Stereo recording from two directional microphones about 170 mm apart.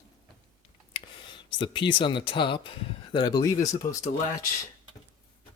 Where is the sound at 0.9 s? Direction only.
30° left (ahead or behind).